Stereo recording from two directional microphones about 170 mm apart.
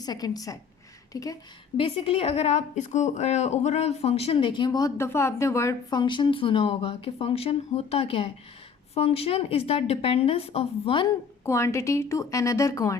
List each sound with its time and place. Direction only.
0.0 s a woman's voice: 25° left (ahead or behind)
1.7 s a woman's voice: 35° left (ahead or behind)
11.4 s a woman's voice: 15° left (ahead or behind)